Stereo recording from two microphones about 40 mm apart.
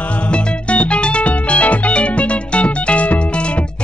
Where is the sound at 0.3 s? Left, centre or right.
Left.